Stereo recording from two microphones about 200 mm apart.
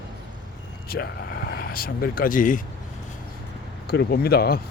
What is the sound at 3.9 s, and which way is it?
Speech, 50° left (ahead or behind).